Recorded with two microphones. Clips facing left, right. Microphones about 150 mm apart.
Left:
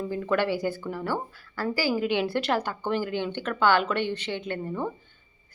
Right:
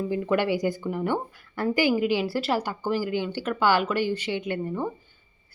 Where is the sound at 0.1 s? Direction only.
15° right (ahead or behind).